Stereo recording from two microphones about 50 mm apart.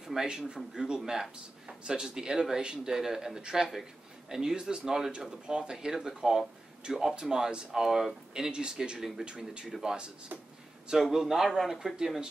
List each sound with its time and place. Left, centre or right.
0.0 s speech: centre